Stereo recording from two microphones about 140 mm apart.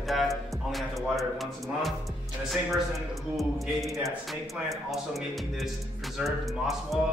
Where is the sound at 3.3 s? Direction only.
Centre (ahead or behind).